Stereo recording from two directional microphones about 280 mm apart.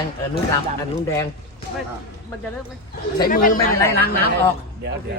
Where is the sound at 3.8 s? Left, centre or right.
Centre.